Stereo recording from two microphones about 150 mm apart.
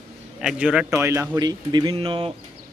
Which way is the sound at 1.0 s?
20° right (ahead or behind).